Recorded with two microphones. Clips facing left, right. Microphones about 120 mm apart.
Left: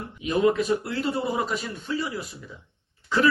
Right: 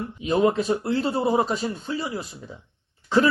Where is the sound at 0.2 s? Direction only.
30° right (ahead or behind).